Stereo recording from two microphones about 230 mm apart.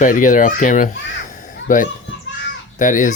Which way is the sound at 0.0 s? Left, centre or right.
Left.